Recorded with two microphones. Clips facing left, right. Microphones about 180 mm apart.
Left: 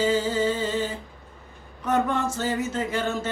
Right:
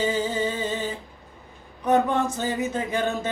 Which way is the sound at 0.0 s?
15° right (ahead or behind).